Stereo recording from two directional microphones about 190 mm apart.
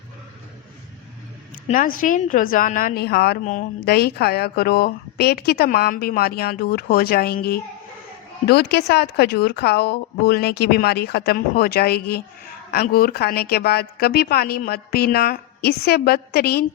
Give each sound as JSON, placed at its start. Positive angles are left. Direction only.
{"t": 1.7, "sound": "a woman's voice", "side_deg": 45}
{"t": 3.4, "sound": "speech", "side_deg": 40}
{"t": 3.8, "sound": "a woman's voice", "side_deg": 55}